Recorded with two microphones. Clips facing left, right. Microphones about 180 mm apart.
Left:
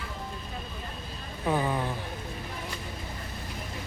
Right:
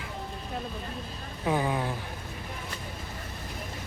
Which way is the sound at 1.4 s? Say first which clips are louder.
Even; 10° right (ahead or behind).